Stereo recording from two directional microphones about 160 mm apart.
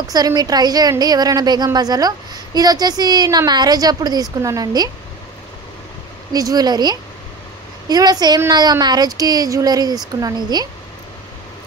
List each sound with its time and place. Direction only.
0.0 s a woman's voice: 20° right (ahead or behind)
6.3 s a woman's voice: 25° right (ahead or behind)